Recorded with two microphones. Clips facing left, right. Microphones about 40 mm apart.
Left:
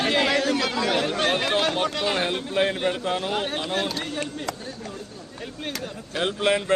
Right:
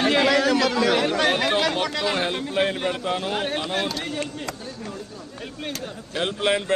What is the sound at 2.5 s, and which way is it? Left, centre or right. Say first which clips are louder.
Speech: left 1 dB; centre.